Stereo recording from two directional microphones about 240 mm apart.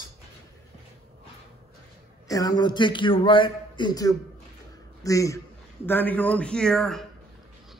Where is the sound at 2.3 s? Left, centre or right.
Centre.